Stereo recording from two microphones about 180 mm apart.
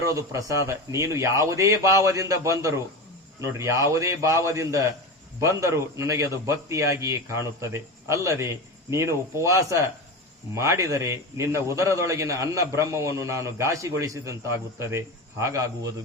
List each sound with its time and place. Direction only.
0.0 s a man's voice: 15° right (ahead or behind)